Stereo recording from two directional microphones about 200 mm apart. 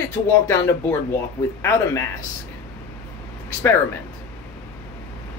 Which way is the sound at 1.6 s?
15° left (ahead or behind).